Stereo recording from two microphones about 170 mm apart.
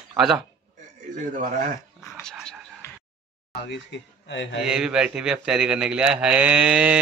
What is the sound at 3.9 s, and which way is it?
Speech, 90° left.